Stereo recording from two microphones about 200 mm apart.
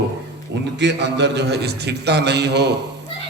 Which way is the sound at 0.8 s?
60° right (ahead or behind).